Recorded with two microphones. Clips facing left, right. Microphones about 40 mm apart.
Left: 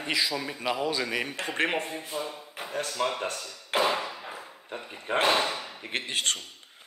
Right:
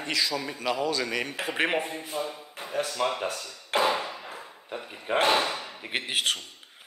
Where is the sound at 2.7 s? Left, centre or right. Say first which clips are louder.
Right 2 dB; centre.